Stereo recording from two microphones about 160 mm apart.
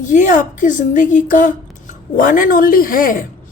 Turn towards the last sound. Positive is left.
turn(degrees=60)  # may be behind; listen again after turning